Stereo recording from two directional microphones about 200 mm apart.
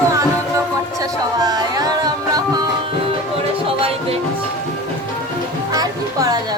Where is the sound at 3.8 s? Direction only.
30° right (ahead or behind).